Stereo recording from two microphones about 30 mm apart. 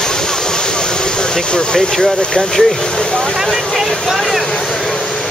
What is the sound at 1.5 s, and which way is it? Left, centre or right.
Speech, left.